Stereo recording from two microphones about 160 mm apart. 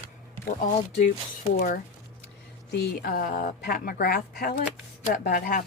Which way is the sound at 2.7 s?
85° left.